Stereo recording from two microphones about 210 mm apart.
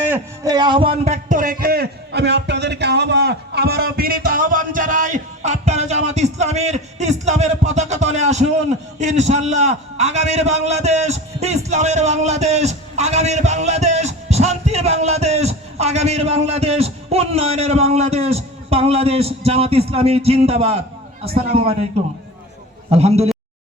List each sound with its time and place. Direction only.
0.0 s a man's voice: 15° right (ahead or behind)
22.9 s a man's voice: 30° right (ahead or behind)